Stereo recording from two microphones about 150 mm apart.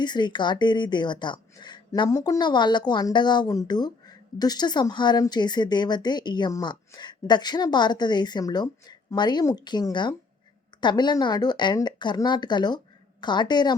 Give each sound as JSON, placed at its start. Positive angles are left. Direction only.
{"t": 0.0, "sound": "speech", "side_deg": 30}